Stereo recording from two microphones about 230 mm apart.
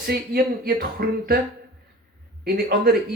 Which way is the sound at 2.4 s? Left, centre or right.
Right.